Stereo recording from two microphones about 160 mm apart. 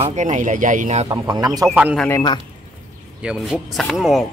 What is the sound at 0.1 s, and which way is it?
Speech, 45° right (ahead or behind).